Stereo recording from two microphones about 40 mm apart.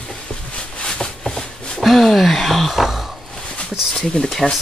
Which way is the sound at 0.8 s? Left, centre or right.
Centre.